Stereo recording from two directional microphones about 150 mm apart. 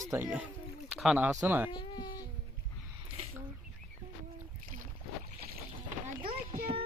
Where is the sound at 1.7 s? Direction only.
30° left (ahead or behind).